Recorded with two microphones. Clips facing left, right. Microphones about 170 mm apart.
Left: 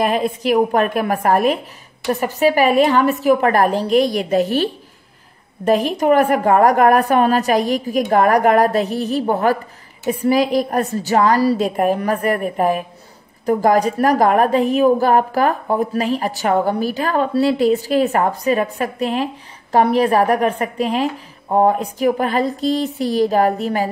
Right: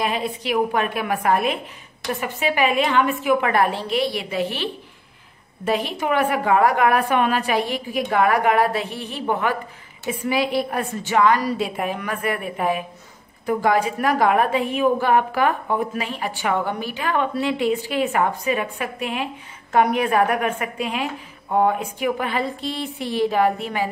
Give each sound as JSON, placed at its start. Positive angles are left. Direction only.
{"t": 0.0, "sound": "a woman's voice", "side_deg": 45}
{"t": 5.7, "sound": "a woman's voice", "side_deg": 45}